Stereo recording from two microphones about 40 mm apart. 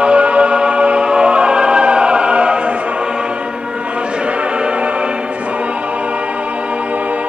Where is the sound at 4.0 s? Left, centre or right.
Right.